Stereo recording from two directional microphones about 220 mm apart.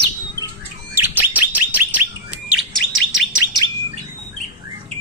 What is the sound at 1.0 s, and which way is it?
Bird, 10° right (ahead or behind).